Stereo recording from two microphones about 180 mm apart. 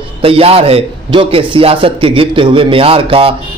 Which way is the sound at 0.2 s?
30° right (ahead or behind).